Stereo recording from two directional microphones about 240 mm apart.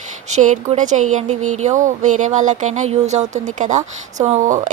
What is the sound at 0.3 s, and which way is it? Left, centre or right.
Speech, right.